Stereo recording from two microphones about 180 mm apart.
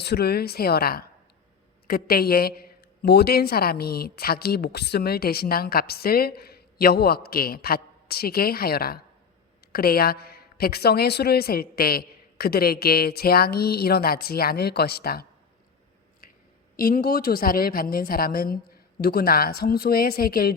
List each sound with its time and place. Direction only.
0.0 s a woman's voice: 65° left (ahead or behind)
16.2 s a sound: 55° left (ahead or behind)
16.7 s a woman's voice: 55° left (ahead or behind)